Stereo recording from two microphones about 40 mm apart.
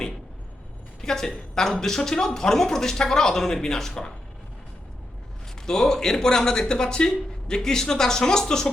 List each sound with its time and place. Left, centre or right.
1.0 s speech: centre
5.6 s speech: centre